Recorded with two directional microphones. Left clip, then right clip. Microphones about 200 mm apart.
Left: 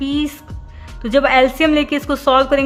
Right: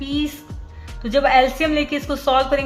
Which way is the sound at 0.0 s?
35° left (ahead or behind).